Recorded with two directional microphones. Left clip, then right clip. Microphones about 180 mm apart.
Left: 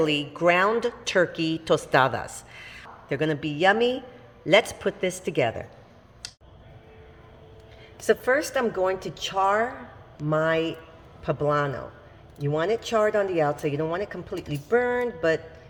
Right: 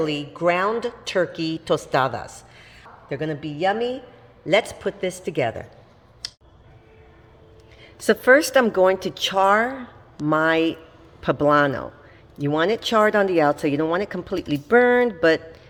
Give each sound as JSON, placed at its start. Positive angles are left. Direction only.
{"t": 0.0, "sound": "a woman's voice", "side_deg": 0}
{"t": 4.4, "sound": "a woman's voice", "side_deg": 0}
{"t": 7.9, "sound": "speech", "side_deg": -45}
{"t": 10.2, "sound": "speech", "side_deg": -45}